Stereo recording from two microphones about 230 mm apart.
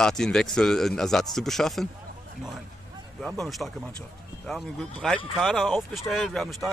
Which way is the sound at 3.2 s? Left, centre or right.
Centre.